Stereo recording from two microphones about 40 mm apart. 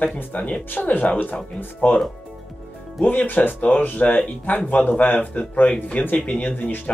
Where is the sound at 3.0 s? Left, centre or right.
Left.